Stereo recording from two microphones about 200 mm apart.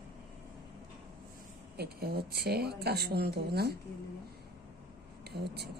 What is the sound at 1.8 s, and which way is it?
Speech, 50° right (ahead or behind).